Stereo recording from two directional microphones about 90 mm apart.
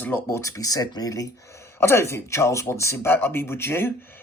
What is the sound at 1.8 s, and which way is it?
Speech, 30° left (ahead or behind).